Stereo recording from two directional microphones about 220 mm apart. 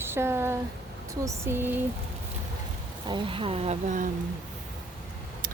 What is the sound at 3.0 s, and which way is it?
Speech, 20° right (ahead or behind).